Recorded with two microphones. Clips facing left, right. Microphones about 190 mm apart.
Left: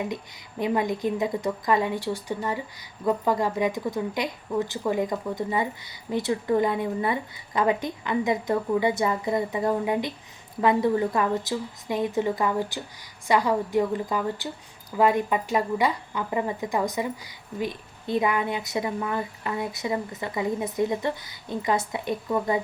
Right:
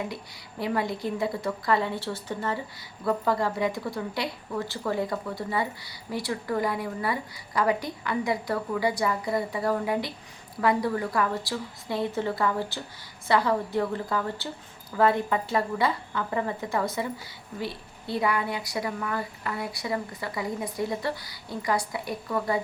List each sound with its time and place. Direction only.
0.6 s a woman's voice: 20° left (ahead or behind)